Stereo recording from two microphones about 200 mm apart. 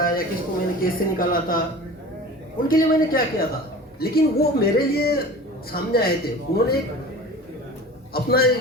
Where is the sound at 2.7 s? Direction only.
45° left (ahead or behind).